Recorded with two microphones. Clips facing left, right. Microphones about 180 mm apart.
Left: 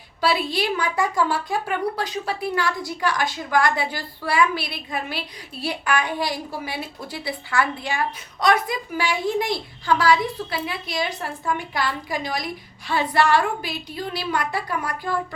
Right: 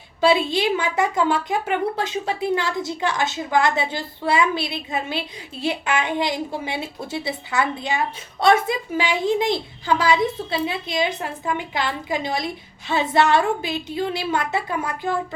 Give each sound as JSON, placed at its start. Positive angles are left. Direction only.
{"t": 0.2, "sound": "a woman's voice", "side_deg": -25}